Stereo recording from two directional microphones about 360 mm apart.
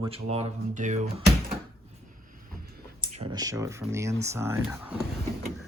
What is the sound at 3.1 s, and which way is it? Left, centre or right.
Speech, centre.